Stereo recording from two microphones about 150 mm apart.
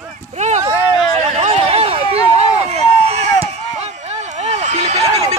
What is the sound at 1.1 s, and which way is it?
Run, 45° right (ahead or behind).